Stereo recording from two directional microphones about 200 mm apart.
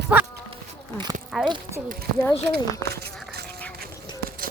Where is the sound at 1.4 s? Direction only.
Centre (ahead or behind).